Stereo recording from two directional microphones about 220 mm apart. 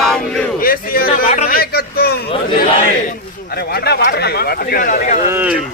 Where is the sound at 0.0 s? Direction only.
Centre (ahead or behind).